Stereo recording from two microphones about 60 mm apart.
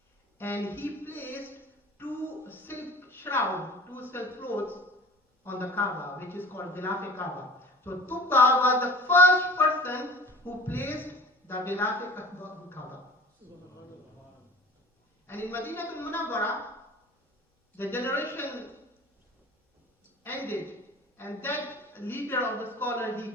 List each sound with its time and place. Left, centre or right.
0.3 s a man's voice: left
2.0 s a sound: left
4.1 s a woman's voice: left
15.3 s a woman's voice: left
17.7 s a woman's voice: left
20.2 s a woman's voice: left